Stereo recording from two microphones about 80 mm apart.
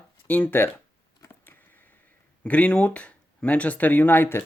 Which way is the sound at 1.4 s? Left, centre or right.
Left.